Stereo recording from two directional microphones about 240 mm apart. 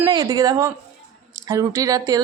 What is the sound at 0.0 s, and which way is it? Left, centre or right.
Speech, centre.